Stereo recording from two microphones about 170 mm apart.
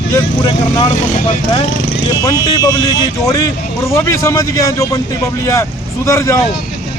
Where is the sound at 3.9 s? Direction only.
15° left (ahead or behind).